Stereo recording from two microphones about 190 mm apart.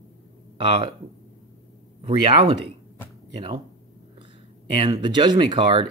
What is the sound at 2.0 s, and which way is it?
Speech, 30° right (ahead or behind).